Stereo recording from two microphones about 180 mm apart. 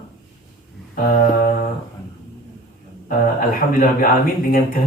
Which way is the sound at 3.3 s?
50° left (ahead or behind).